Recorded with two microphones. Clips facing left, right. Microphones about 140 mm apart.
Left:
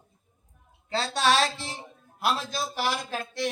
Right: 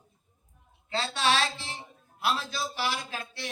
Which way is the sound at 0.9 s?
40° left (ahead or behind).